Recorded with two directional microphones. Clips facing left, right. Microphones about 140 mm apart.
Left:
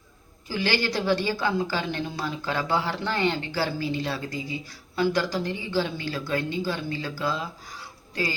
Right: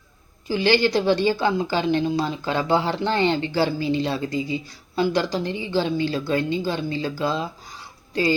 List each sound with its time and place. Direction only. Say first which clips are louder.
0.4 s speech: right 7 dB; 20° right (ahead or behind)